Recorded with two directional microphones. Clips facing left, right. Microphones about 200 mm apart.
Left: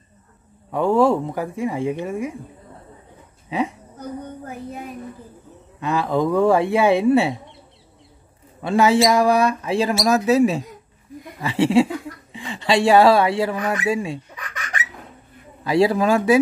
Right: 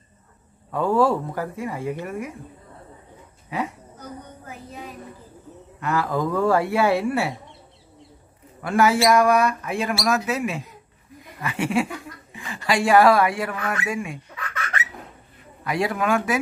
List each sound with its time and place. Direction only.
0.7 s speech: 20° left (ahead or behind)
3.4 s speech: 20° left (ahead or behind)
5.8 s speech: 20° left (ahead or behind)
8.5 s speech: 25° left (ahead or behind)
13.8 s bird: 30° left (ahead or behind)
15.6 s a man's voice: 30° left (ahead or behind)